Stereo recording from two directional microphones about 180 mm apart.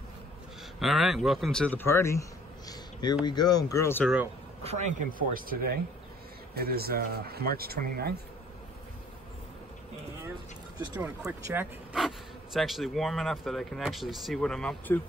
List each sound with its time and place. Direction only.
0.7 s speech: centre (ahead or behind); by 2.2 s 15° left (ahead or behind)
2.7 s a sound: 25° left (ahead or behind)
3.3 s speech: 20° left (ahead or behind)
4.6 s a man's voice: 40° right (ahead or behind); by 8.1 s 60° right (ahead or behind)
11.3 s speech: 10° right (ahead or behind); by 15.0 s 5° left (ahead or behind)